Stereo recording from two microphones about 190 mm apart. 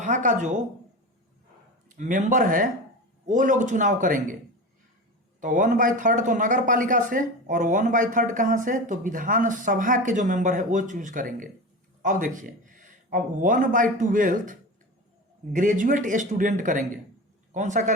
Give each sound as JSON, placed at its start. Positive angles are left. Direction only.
{"t": 0.0, "sound": "a man's voice", "side_deg": -40}
{"t": 2.0, "sound": "a man's voice", "side_deg": -40}
{"t": 5.4, "sound": "speech", "side_deg": -45}
{"t": 15.5, "sound": "a man's voice", "side_deg": -45}